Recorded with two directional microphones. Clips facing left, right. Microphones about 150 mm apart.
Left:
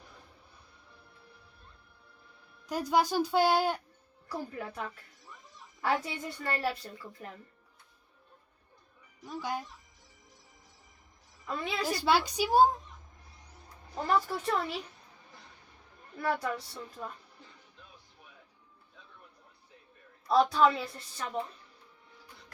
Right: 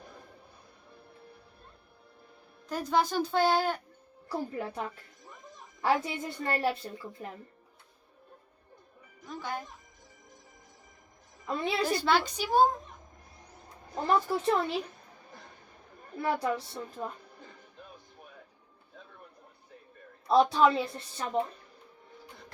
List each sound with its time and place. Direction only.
2.6 s speech: 10° left (ahead or behind)
4.3 s a woman's voice: 30° right (ahead or behind)
9.2 s speech: 10° left (ahead or behind)
11.4 s a woman's voice: 30° right (ahead or behind)
11.9 s speech: 10° left (ahead or behind)
14.1 s a woman's voice: 25° right (ahead or behind)
16.1 s a woman's voice: 25° right (ahead or behind)
20.2 s a woman's voice: 25° right (ahead or behind)